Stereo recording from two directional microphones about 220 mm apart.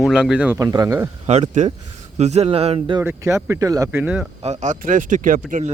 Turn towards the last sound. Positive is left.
turn(degrees=-35)  # may be behind; listen again after turning